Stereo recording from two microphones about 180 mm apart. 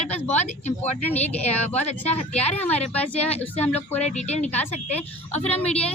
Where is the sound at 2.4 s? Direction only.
10° left (ahead or behind).